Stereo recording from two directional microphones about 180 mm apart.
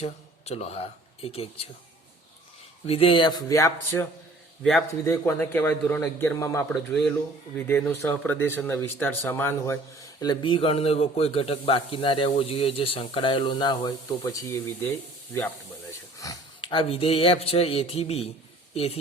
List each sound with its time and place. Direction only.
0.0 s speech: 35° left (ahead or behind)
2.8 s a man's voice: 35° left (ahead or behind); by 4.0 s 15° left (ahead or behind)
5.0 s a man's voice: 15° left (ahead or behind)
10.2 s a man's voice: 25° left (ahead or behind)
16.1 s speech: 20° left (ahead or behind); by 18.9 s 35° left (ahead or behind)